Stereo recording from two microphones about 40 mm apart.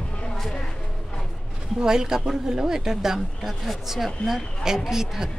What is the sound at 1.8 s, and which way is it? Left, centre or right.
A woman's voice, centre.